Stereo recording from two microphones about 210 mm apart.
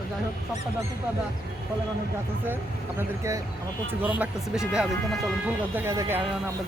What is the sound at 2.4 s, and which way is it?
Speech, 10° right (ahead or behind).